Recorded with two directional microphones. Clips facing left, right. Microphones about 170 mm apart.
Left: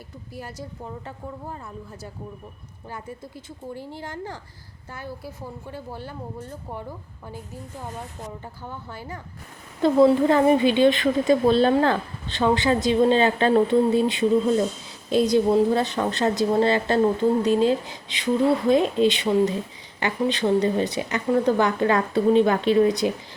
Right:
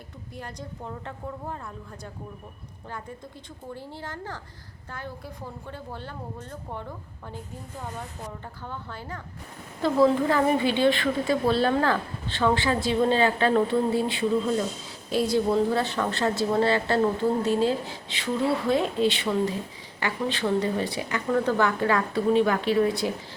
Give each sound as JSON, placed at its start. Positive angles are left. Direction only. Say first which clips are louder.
{"t": 0.3, "sound": "a woman's voice", "louder": "left 2 dB", "side_deg": 5}
{"t": 3.8, "sound": "speech", "louder": "left 3 dB", "side_deg": 15}
{"t": 8.6, "sound": "speech", "louder": "even", "side_deg": 10}
{"t": 9.8, "sound": "a woman's voice", "louder": "left 4 dB", "side_deg": 20}